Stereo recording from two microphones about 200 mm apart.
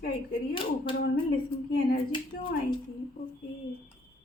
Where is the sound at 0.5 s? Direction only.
25° left (ahead or behind).